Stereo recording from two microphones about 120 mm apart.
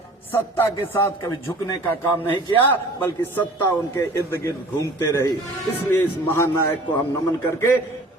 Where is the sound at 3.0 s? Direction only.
15° left (ahead or behind).